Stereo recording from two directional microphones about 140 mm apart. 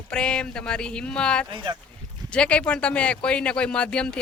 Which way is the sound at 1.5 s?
35° right (ahead or behind).